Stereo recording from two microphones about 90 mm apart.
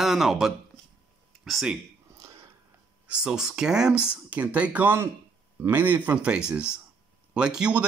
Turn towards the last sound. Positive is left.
turn(degrees=-10)  # may be behind; listen again after turning